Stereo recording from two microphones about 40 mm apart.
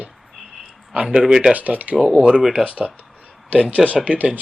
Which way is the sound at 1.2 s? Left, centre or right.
Centre.